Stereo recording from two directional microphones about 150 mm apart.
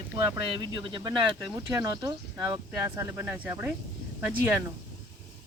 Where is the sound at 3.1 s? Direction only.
15° right (ahead or behind).